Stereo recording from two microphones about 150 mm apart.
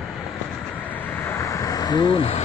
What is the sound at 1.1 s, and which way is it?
Vehicle, 15° left (ahead or behind).